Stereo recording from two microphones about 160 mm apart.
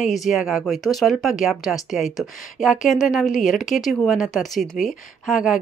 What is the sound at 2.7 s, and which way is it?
Speech, 50° left (ahead or behind).